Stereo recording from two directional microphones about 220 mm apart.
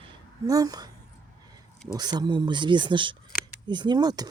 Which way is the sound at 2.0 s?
20° right (ahead or behind).